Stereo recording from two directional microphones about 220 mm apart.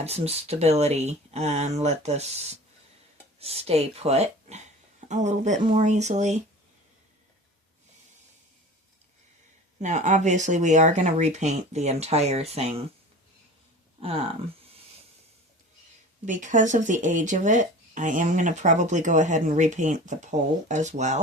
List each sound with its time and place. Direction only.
0.0 s speech: 30° right (ahead or behind)
9.8 s speech: 35° right (ahead or behind)
14.0 s speech: 25° right (ahead or behind)
16.2 s speech: 35° right (ahead or behind)